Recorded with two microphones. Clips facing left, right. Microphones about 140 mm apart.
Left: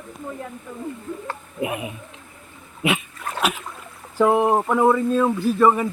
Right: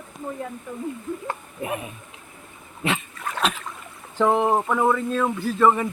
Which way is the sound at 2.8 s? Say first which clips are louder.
Left 3 dB; 10° left (ahead or behind).